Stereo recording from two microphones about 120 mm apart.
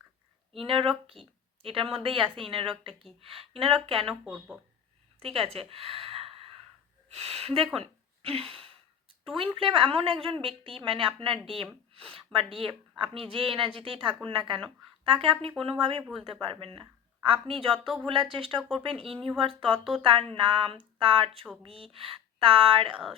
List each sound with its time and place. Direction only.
0.6 s a woman's voice: 50° right (ahead or behind)
4.0 s speech: centre (ahead or behind)
5.2 s a woman's voice: 55° right (ahead or behind)
16.8 s a sound: 45° right (ahead or behind)
17.5 s a woman's voice: 50° right (ahead or behind)
18.9 s speech: 5° left (ahead or behind)
19.4 s a woman's voice: 50° right (ahead or behind)
19.7 s speech: centre (ahead or behind)
20.0 s a woman's voice: 45° right (ahead or behind)